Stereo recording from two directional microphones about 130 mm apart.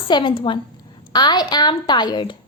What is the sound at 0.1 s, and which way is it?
A woman's voice, 40° left (ahead or behind).